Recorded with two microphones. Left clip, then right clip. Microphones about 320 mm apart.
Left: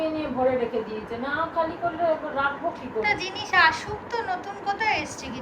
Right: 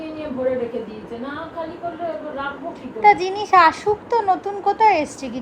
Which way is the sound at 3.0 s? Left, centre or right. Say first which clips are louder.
Right 11 dB; centre.